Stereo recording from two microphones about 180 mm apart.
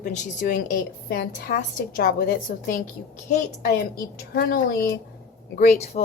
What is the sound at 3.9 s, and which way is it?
Speech, 55° left (ahead or behind).